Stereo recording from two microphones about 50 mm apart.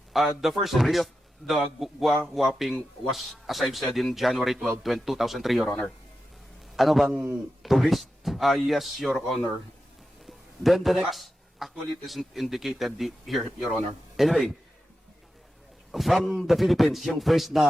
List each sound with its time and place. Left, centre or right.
0.1 s speech: centre
5.6 s speech: left
6.7 s speech: centre
10.2 s a sound: centre
12.0 s speech: centre
15.9 s speech: centre